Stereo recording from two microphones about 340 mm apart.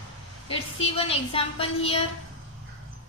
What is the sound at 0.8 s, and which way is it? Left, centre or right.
A child's voice, centre.